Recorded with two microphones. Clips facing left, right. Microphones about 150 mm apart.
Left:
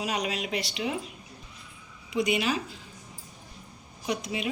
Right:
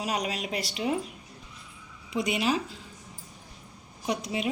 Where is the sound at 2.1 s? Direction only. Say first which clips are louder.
Even; 35° right (ahead or behind).